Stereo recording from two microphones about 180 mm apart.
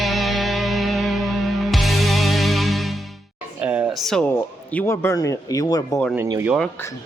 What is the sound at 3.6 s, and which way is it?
Speech, 10° right (ahead or behind).